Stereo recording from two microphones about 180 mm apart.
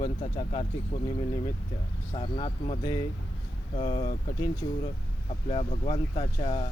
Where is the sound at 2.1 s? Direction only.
30° left (ahead or behind).